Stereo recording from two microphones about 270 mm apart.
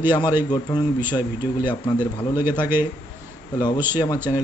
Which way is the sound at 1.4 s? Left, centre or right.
Centre.